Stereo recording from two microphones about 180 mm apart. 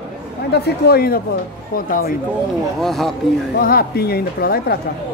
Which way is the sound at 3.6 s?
55° left (ahead or behind).